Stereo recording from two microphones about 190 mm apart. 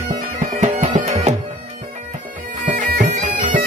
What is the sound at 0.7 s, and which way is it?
Bagpipes, 40° right (ahead or behind).